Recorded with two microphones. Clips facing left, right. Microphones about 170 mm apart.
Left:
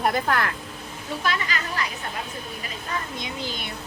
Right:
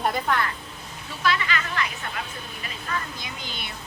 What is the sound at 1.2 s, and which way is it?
Speech, 40° left (ahead or behind).